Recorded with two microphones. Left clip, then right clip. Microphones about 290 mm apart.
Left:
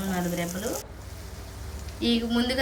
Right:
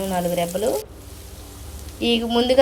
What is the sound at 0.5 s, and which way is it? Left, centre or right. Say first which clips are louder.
Speech: right 11 dB; right.